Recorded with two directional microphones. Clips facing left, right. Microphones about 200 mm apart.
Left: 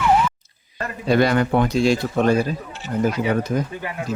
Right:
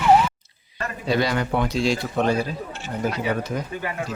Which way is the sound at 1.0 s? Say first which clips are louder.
Left 5 dB; 55° left (ahead or behind).